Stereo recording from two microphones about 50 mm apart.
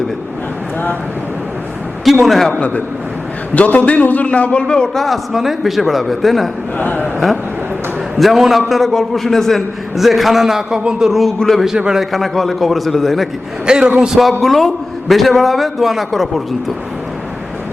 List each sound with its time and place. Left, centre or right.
2.2 s a man's voice: centre
2.5 s a man's voice: left
4.9 s a man's voice: centre
6.7 s a man's voice: left
8.2 s a man's voice: centre
11.1 s a man's voice: centre
13.7 s a man's voice: centre
14.2 s a man's voice: centre